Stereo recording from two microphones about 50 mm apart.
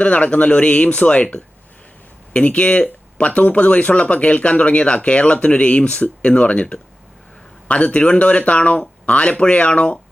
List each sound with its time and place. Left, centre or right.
0.0 s speech: left